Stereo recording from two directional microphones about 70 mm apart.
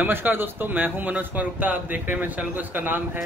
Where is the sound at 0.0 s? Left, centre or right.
Right.